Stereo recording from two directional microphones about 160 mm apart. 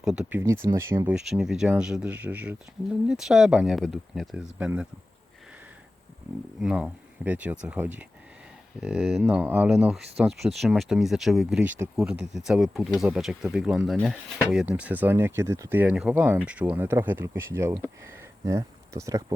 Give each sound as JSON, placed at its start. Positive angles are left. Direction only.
{"t": 0.0, "sound": "speech", "side_deg": -5}
{"t": 1.0, "sound": "speech", "side_deg": -5}
{"t": 6.6, "sound": "speech", "side_deg": -5}